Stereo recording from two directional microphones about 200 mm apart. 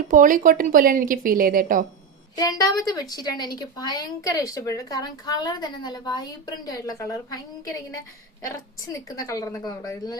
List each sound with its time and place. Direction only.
0.1 s speech: 40° right (ahead or behind)
2.3 s a woman's voice: 20° left (ahead or behind)